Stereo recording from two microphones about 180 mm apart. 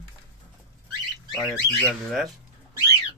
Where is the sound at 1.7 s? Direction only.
Centre (ahead or behind).